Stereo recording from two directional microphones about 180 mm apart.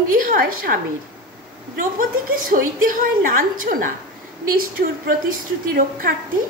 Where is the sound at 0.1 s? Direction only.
55° right (ahead or behind).